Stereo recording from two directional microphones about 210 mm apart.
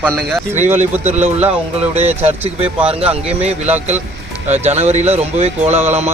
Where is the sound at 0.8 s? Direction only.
35° right (ahead or behind).